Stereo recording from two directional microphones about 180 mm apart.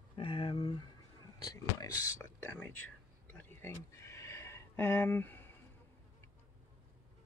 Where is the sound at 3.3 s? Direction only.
15° left (ahead or behind).